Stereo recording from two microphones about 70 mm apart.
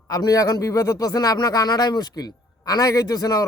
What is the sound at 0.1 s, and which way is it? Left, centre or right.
A man's voice, left.